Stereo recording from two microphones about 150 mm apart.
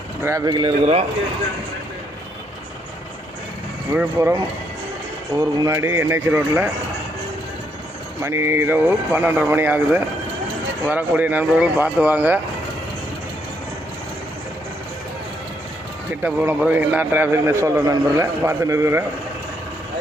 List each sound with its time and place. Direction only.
0.2 s speech: 20° right (ahead or behind)
3.9 s speech: 20° right (ahead or behind)
5.4 s a man's voice: 20° right (ahead or behind)
8.2 s a man's voice: 15° right (ahead or behind)
16.2 s a man's voice: 10° right (ahead or behind)